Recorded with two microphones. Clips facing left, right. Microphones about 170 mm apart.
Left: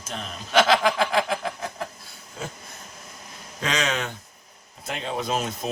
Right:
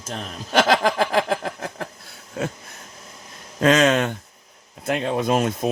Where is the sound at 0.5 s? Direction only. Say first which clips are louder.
Right 1 dB; 45° right (ahead or behind).